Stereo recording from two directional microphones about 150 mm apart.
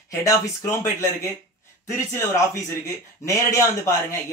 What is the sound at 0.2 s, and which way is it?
Speech, 20° left (ahead or behind).